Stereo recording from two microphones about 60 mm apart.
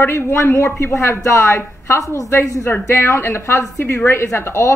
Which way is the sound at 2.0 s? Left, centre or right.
Left.